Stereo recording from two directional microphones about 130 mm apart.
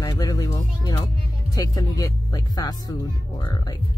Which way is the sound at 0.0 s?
25° left (ahead or behind).